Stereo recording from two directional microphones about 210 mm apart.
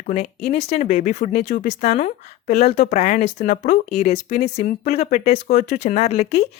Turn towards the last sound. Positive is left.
turn(degrees=30)  # may be behind; listen again after turning